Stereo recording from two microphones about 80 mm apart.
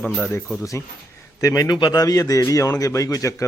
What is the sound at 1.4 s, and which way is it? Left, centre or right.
Speech, left.